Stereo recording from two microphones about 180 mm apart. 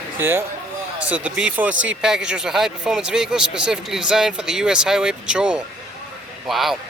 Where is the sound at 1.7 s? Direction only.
90° right.